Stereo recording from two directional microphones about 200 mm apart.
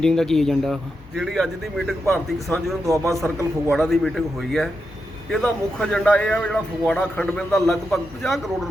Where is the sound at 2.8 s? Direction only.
15° right (ahead or behind).